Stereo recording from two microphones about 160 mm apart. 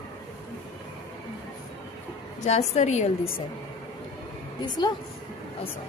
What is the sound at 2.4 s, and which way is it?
Speech, 45° left (ahead or behind).